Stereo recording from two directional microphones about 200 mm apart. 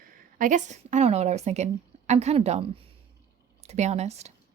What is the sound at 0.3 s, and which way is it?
Speech, 40° right (ahead or behind).